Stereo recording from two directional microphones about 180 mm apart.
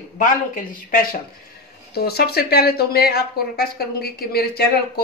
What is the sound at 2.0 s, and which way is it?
Speech, 60° left (ahead or behind).